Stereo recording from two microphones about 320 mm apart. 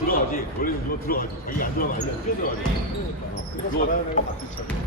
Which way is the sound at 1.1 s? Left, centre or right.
Left.